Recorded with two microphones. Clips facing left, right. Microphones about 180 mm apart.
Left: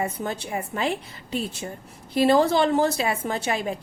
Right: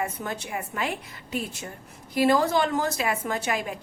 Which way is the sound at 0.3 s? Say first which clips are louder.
Left 3 dB; 30° left (ahead or behind).